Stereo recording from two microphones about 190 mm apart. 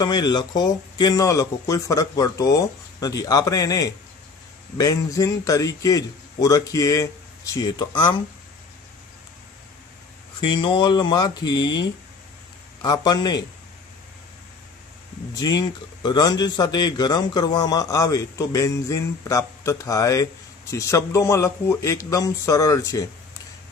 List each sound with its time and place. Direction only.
0.0 s a man's voice: 20° left (ahead or behind)
10.4 s a man's voice: 25° left (ahead or behind)
12.8 s a man's voice: 20° left (ahead or behind)
15.3 s a man's voice: 20° left (ahead or behind)